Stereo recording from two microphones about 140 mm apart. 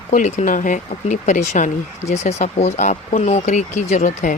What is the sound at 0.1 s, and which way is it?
Speech, 60° left (ahead or behind).